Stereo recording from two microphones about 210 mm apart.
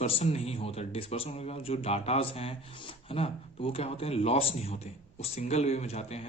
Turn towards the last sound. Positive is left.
turn(degrees=30)  # may be behind; listen again after turning